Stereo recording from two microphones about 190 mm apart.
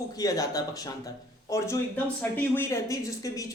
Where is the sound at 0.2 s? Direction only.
20° left (ahead or behind).